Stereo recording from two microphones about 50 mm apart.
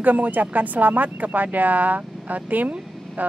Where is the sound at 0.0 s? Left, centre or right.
Right.